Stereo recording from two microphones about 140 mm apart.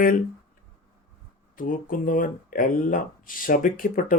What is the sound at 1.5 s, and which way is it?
Speech, 80° left.